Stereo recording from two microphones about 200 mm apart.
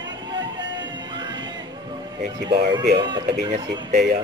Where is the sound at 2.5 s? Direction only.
55° right (ahead or behind).